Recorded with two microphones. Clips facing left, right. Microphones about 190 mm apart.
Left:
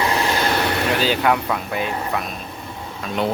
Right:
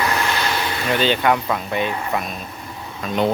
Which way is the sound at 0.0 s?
30° left (ahead or behind).